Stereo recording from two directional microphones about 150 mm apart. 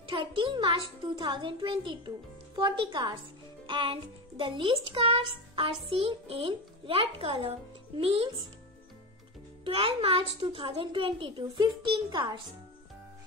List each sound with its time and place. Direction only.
0.1 s a child's voice: 35° right (ahead or behind)
9.7 s a child's voice: 35° right (ahead or behind)